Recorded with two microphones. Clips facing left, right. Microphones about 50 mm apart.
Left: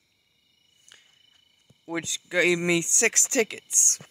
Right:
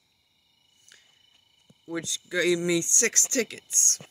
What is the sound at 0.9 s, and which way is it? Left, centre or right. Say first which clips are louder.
Cricket: left 2 dB; right.